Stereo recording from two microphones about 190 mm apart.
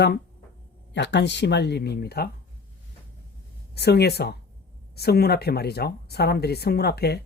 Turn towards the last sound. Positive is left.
turn(degrees=55)  # may be behind; listen again after turning